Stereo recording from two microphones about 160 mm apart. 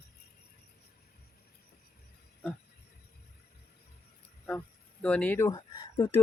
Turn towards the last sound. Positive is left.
turn(degrees=20)  # may be behind; listen again after turning